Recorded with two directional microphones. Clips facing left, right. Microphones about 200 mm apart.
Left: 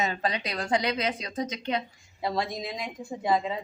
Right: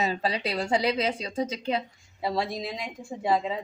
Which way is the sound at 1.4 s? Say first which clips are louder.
Right 2 dB; 5° right (ahead or behind).